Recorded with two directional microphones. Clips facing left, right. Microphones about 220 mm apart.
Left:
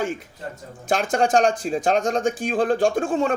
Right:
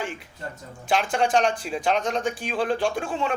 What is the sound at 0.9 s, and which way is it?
Speech, 50° left (ahead or behind).